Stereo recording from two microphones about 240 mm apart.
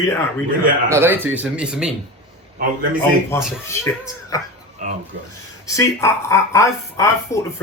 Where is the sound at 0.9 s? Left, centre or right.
Centre.